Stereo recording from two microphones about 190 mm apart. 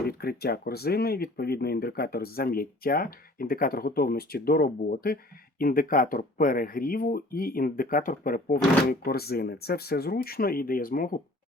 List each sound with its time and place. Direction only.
0.0 s speech: 55° left (ahead or behind)